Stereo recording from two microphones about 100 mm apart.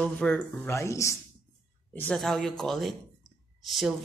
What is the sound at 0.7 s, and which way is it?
Speech, 30° left (ahead or behind).